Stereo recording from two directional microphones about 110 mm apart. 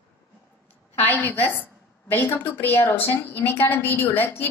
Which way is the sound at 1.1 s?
15° left (ahead or behind).